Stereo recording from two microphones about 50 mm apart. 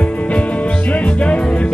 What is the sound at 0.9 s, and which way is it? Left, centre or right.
Music, left.